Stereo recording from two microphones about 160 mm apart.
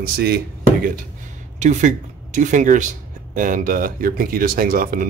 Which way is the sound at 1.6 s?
50° right (ahead or behind).